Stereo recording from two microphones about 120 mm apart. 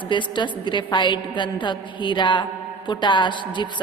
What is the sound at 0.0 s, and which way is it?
A woman's voice, 40° left (ahead or behind).